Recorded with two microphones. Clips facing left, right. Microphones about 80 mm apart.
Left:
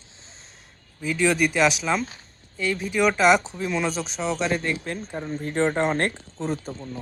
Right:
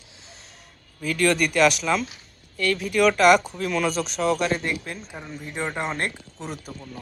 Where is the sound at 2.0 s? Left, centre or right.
Left.